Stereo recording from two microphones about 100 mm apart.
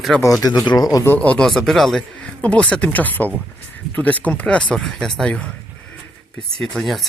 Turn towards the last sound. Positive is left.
turn(degrees=0)  # may be behind; listen again after turning